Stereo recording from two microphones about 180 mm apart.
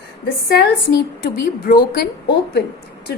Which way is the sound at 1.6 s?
60° left (ahead or behind).